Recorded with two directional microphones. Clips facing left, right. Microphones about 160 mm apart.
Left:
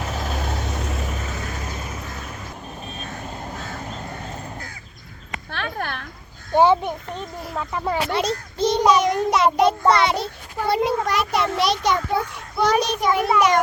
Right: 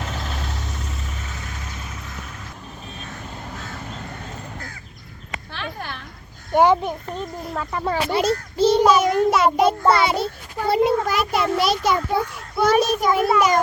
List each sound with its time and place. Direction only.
0.3 s vehicle: 55° left (ahead or behind)
5.5 s a sound: 55° left (ahead or behind)
6.5 s a child's voice: 15° right (ahead or behind)
7.5 s speech: 10° left (ahead or behind)
8.1 s a child's voice: 5° right (ahead or behind)